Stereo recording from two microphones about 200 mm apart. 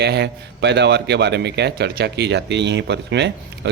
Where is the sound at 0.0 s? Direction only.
55° right (ahead or behind).